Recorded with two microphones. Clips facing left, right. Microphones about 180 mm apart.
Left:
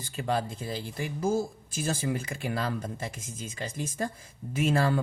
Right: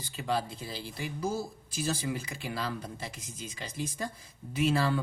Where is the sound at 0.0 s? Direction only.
50° left (ahead or behind).